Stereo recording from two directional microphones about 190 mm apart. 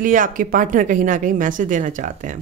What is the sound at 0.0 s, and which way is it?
A woman's voice, 45° right (ahead or behind).